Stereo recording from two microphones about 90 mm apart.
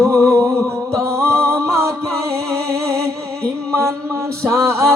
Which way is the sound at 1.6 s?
30° right (ahead or behind).